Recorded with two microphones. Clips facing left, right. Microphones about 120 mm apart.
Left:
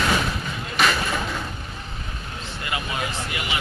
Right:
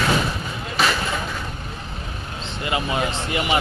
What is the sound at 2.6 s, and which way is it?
Speech, 25° right (ahead or behind).